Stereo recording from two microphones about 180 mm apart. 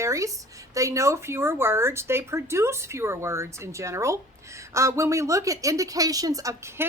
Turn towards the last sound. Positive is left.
turn(degrees=-15)  # may be behind; listen again after turning